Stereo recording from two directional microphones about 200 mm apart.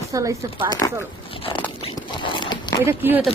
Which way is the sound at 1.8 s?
30° left (ahead or behind).